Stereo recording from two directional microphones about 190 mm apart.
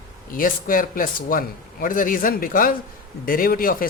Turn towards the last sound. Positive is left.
turn(degrees=50)  # may be behind; listen again after turning